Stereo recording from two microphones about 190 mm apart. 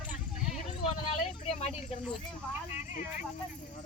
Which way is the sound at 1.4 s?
35° left (ahead or behind).